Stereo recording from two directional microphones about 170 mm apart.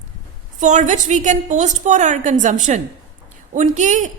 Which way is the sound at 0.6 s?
45° right (ahead or behind).